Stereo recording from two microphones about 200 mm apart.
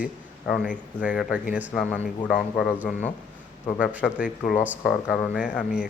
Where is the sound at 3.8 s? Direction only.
5° right (ahead or behind).